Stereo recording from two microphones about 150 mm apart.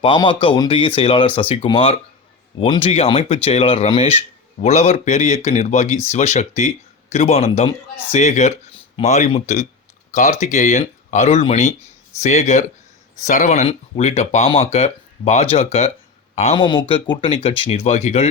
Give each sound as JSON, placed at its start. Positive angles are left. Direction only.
{"t": 0.0, "sound": "speech", "side_deg": 35}
{"t": 16.6, "sound": "speech", "side_deg": 30}